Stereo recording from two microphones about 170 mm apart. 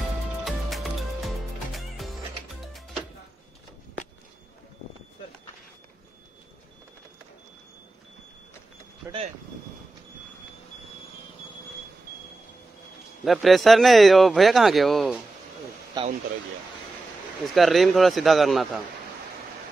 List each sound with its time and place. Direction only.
0.5 s music: centre (ahead or behind)
13.2 s speech: centre (ahead or behind)
16.0 s a sound: 25° right (ahead or behind)
17.6 s speech: centre (ahead or behind)